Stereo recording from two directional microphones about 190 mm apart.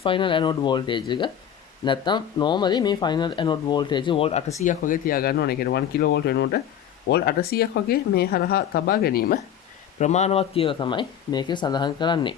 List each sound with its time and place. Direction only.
0.0 s speech: 25° left (ahead or behind)
4.6 s speech: 45° left (ahead or behind)
10.0 s speech: 35° left (ahead or behind)